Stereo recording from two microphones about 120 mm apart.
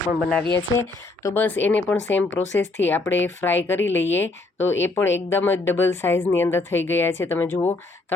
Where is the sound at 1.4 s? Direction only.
15° left (ahead or behind).